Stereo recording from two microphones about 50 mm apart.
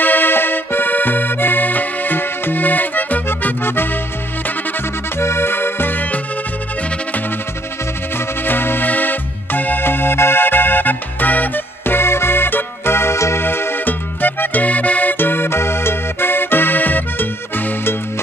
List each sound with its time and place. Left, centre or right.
0.0 s accordion: left
3.6 s music: left
5.1 s music: left
8.5 s music: left
13.4 s music: left
13.8 s music: left